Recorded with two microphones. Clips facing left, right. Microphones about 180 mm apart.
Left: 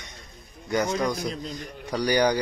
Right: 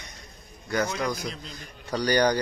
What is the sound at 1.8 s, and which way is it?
Speech, 10° left (ahead or behind).